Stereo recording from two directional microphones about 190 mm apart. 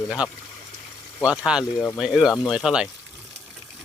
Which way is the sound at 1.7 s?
20° left (ahead or behind).